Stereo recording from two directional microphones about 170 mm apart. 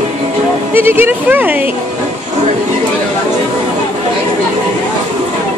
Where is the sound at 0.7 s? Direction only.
10° right (ahead or behind).